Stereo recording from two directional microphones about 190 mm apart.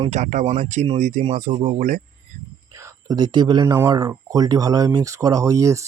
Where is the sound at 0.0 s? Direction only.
35° right (ahead or behind).